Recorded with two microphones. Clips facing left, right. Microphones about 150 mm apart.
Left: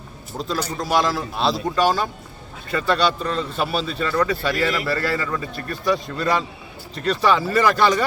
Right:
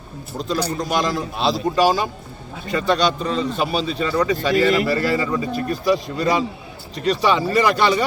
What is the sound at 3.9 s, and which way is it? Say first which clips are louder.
A man's voice: right 1 dB; 10° right (ahead or behind).